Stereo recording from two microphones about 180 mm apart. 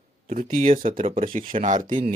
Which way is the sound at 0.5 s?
35° right (ahead or behind).